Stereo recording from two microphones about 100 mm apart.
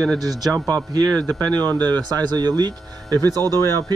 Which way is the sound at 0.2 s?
40° right (ahead or behind).